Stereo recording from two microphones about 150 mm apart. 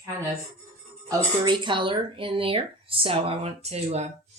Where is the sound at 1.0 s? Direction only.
30° right (ahead or behind).